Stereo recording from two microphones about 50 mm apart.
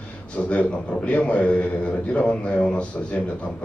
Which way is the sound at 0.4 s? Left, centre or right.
Left.